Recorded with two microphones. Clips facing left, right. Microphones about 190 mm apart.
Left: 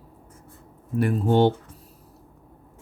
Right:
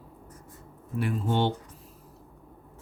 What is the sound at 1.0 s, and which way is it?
Speech, 45° left (ahead or behind).